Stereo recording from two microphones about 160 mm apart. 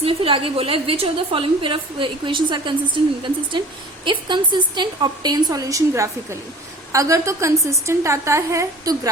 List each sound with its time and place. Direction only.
0.0 s a woman's voice: 35° right (ahead or behind)